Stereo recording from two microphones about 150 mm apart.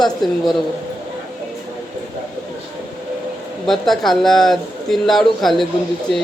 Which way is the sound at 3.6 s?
Centre (ahead or behind).